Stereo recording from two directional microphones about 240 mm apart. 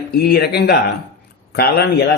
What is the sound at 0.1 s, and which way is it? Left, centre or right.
Speech, left.